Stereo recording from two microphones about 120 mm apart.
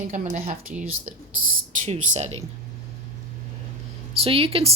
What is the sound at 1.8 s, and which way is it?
Speech, 75° right (ahead or behind).